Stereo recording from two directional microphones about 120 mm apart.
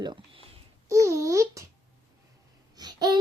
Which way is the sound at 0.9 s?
25° right (ahead or behind).